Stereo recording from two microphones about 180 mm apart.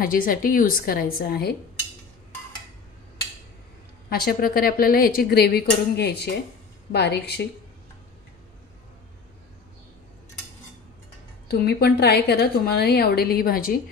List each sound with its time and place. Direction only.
0.0 s a woman's voice: 50° left (ahead or behind)
4.1 s a woman's voice: 55° left (ahead or behind)
11.4 s a woman's voice: 60° left (ahead or behind)